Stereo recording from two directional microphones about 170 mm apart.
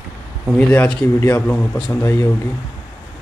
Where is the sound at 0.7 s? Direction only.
10° left (ahead or behind).